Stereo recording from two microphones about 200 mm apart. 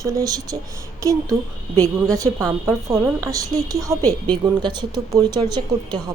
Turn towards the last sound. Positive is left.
turn(degrees=-20)  # may be behind; listen again after turning